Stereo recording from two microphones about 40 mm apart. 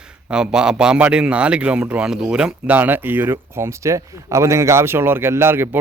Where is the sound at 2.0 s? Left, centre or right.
Centre.